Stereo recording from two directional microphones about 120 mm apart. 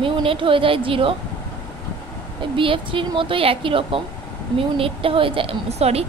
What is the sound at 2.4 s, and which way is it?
A woman's voice, 45° right (ahead or behind).